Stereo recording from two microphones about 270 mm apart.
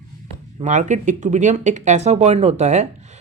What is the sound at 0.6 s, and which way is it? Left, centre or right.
Speech, right.